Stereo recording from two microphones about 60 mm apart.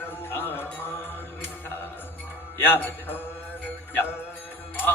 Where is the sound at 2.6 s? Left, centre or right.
Left.